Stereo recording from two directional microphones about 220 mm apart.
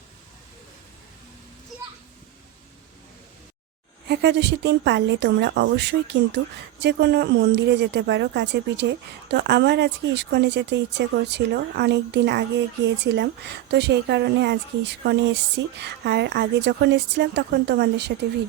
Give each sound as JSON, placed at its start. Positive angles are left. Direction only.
{"t": 4.1, "sound": "speech", "side_deg": -50}